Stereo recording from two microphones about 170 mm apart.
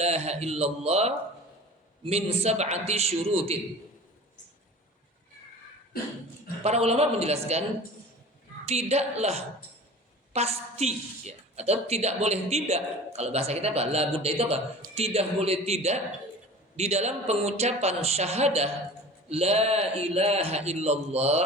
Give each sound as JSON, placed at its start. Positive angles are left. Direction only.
{"t": 0.0, "sound": "a man's voice", "side_deg": -40}
{"t": 6.6, "sound": "a man's voice", "side_deg": -40}
{"t": 8.6, "sound": "a man's voice", "side_deg": -40}